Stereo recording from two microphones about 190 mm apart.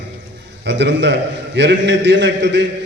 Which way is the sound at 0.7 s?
65° right (ahead or behind).